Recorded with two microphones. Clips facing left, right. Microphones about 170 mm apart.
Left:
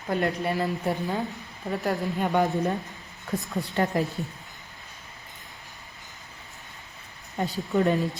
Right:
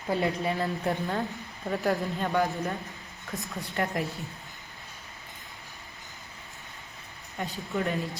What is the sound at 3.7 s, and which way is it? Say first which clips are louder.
Speech: left 4 dB; 20° left (ahead or behind).